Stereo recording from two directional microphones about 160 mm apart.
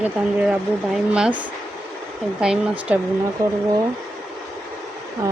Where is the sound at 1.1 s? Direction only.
10° right (ahead or behind).